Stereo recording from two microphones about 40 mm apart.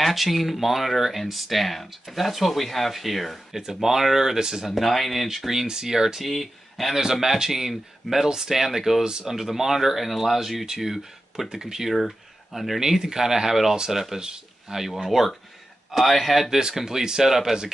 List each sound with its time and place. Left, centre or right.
0.0 s speech: centre
4.6 s speech: centre
6.2 s speech: centre
7.0 s speech: centre
9.0 s speech: centre
9.3 s speech: centre
16.5 s speech: centre